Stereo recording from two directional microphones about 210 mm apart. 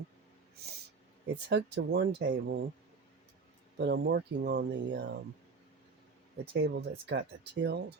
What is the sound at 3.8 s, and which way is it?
Speech, 55° right (ahead or behind).